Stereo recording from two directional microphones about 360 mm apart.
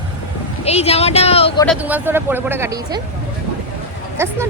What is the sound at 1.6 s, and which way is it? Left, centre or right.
Speech, centre.